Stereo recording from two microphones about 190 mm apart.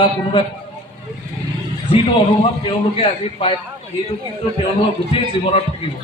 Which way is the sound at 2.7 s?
30° left (ahead or behind).